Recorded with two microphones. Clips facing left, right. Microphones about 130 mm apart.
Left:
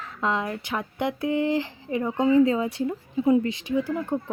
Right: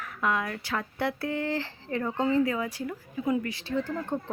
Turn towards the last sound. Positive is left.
turn(degrees=10)  # may be behind; listen again after turning